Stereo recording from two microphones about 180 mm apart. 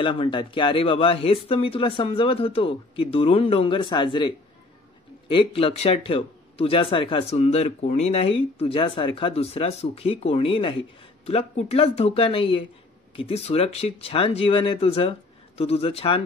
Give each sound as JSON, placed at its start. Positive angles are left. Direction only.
{"t": 0.0, "sound": "speech", "side_deg": 30}
{"t": 5.3, "sound": "speech", "side_deg": 30}